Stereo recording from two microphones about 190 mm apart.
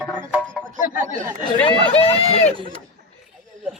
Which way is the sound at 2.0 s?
30° left (ahead or behind).